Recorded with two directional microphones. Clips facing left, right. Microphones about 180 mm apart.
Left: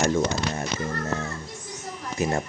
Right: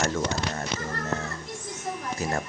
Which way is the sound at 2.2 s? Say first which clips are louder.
Left 6 dB; 15° left (ahead or behind).